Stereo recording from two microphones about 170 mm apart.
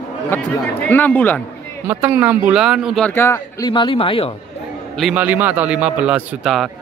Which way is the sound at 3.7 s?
30° left (ahead or behind).